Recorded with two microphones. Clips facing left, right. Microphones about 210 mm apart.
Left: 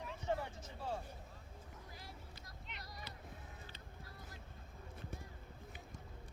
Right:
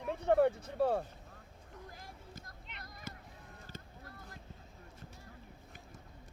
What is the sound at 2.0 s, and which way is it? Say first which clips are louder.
Vehicle: right 3 dB; 45° right (ahead or behind).